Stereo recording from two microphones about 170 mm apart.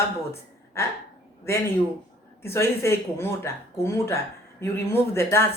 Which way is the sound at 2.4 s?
15° left (ahead or behind).